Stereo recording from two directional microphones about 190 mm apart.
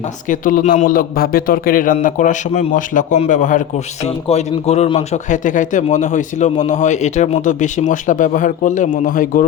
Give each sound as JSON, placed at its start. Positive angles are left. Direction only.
{"t": 0.3, "sound": "a man's voice", "side_deg": 45}